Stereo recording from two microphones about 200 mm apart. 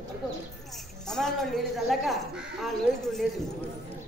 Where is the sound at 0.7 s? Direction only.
Centre (ahead or behind).